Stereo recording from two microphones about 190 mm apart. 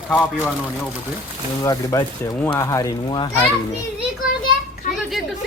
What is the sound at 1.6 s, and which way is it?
Speech, 20° left (ahead or behind).